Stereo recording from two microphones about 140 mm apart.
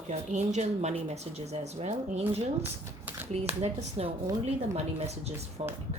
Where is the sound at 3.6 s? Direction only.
45° right (ahead or behind).